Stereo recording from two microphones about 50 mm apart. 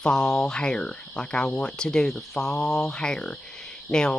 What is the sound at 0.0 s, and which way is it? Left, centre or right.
Speech, centre.